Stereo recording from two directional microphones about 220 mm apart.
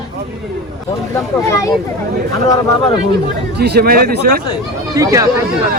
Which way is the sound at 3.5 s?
45° right (ahead or behind).